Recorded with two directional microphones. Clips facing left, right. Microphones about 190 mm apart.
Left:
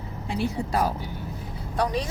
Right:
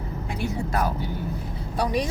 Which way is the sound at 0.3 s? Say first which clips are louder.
Left 2 dB; 30° left (ahead or behind).